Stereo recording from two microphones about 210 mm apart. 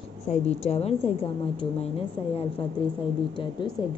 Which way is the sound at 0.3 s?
30° left (ahead or behind).